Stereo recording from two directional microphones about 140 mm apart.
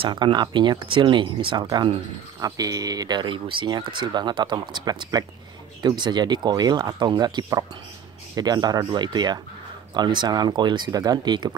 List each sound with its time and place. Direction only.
0.0 s speech: 35° right (ahead or behind)